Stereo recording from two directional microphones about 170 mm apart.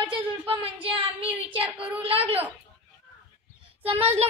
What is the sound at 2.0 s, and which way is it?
Speech, 35° right (ahead or behind).